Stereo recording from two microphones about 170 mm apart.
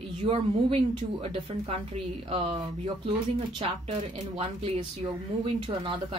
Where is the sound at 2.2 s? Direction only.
35° right (ahead or behind).